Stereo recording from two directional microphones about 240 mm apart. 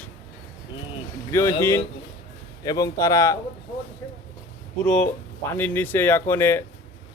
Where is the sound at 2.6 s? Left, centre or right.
Centre.